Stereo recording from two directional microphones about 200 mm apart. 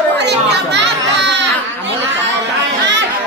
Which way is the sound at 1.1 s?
60° right (ahead or behind).